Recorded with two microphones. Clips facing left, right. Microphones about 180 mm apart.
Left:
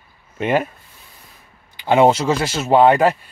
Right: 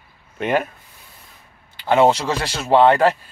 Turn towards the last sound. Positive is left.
turn(degrees=10)  # may be behind; listen again after turning